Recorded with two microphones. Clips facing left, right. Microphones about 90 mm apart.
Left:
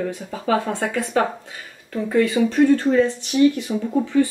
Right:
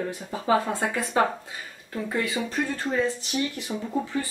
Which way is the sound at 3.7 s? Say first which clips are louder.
Left 7 dB; 5° right (ahead or behind).